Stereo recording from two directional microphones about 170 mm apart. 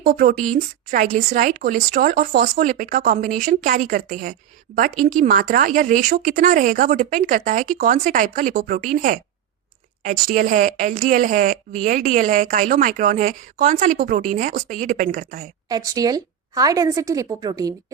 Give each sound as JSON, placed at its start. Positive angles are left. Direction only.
{"t": 0.1, "sound": "a woman's voice", "side_deg": -50}
{"t": 15.7, "sound": "a woman's voice", "side_deg": -20}